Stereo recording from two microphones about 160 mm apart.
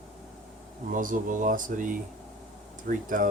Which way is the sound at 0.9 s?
55° right (ahead or behind).